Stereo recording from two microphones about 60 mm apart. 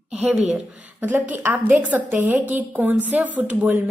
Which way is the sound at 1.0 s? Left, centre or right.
Right.